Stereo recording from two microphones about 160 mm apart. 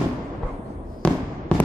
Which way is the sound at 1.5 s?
5° left (ahead or behind).